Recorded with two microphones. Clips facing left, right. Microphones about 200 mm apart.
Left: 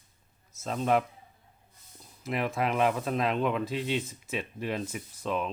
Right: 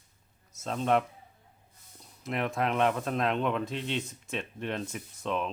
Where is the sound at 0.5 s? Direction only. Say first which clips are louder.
Even; centre (ahead or behind).